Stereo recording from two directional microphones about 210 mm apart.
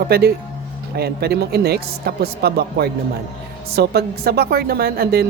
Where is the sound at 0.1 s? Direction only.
50° right (ahead or behind).